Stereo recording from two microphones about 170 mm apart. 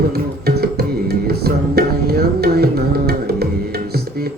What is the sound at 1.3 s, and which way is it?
Tabla, 65° right (ahead or behind).